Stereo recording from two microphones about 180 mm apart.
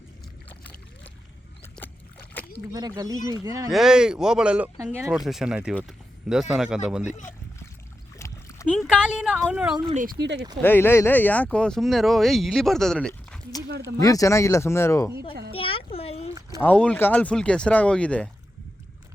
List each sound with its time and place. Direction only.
2.4 s splash: 10° left (ahead or behind)
2.7 s speech: 20° right (ahead or behind)
3.7 s speech: centre (ahead or behind)
8.2 s splash: 15° left (ahead or behind)
8.6 s speech: 5° right (ahead or behind)
9.9 s speech: 45° right (ahead or behind)
10.2 s speech: 75° right (ahead or behind)
10.6 s speech: 10° left (ahead or behind)
13.7 s speech: 65° right (ahead or behind)
14.0 s speech: 20° left (ahead or behind)
15.3 s speech: 60° right (ahead or behind)
15.5 s a sound: 30° left (ahead or behind)
16.6 s speech: 10° left (ahead or behind)